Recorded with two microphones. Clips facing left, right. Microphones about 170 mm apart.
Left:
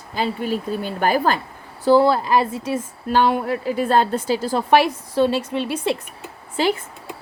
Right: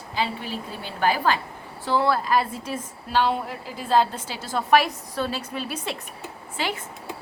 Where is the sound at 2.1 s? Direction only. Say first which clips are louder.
Left 4 dB; 25° left (ahead or behind).